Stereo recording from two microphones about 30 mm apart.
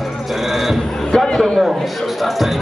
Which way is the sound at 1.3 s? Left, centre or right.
Left.